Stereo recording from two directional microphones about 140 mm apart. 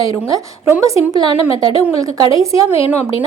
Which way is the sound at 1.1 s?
30° right (ahead or behind).